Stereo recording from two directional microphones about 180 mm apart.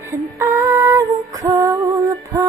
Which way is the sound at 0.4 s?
15° right (ahead or behind).